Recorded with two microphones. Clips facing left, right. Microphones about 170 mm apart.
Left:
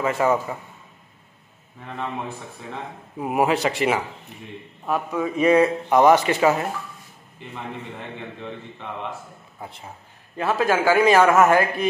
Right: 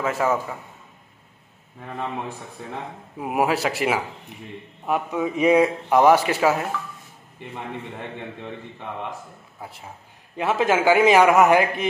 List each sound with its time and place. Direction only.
0.0 s speech: centre (ahead or behind)
3.2 s speech: 5° right (ahead or behind)
4.8 s speech: 20° right (ahead or behind)
9.6 s speech: 5° right (ahead or behind)
10.3 s a man's voice: 20° right (ahead or behind)